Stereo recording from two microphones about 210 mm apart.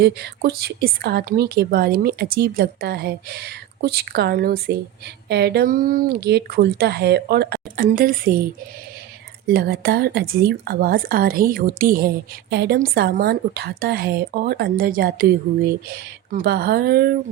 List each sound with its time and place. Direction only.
0.0 s speech: 50° right (ahead or behind)
9.5 s speech: 45° right (ahead or behind)